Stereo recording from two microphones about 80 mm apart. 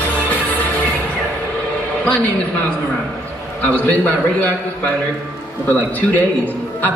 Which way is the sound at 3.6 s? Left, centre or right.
Left.